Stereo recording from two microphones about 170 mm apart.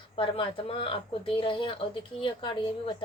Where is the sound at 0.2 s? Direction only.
30° left (ahead or behind).